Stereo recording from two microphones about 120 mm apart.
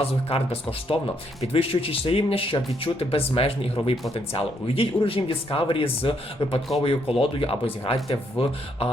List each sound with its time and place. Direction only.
0.0 s speech: 55° left (ahead or behind)